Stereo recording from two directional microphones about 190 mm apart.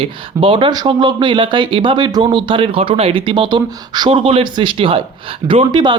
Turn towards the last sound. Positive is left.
turn(degrees=-25)  # may be behind; listen again after turning